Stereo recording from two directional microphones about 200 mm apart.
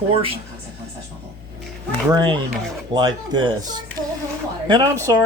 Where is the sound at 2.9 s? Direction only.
20° right (ahead or behind).